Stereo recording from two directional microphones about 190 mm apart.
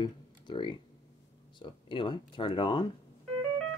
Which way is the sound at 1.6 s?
25° left (ahead or behind).